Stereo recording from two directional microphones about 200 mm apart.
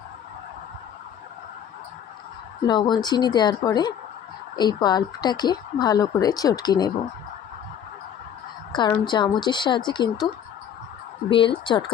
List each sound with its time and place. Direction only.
2.6 s speech: 20° left (ahead or behind)
8.7 s speech: 20° left (ahead or behind)
11.3 s speech: 25° left (ahead or behind)